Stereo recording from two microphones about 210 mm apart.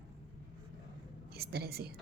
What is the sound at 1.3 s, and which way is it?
Speech, 50° right (ahead or behind).